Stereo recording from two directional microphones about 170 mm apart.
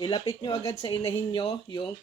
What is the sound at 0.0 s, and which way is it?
Speech, 25° left (ahead or behind).